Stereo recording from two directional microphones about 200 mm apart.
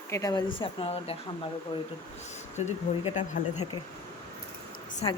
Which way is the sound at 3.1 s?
40° left (ahead or behind).